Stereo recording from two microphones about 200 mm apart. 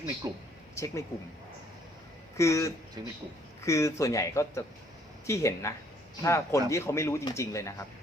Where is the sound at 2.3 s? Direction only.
15° left (ahead or behind).